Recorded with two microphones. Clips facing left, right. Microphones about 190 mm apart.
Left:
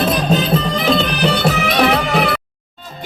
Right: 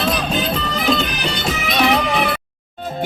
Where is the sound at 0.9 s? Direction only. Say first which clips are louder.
Left 6 dB; 55° left (ahead or behind).